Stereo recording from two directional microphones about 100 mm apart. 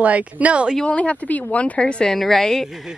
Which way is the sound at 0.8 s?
15° left (ahead or behind).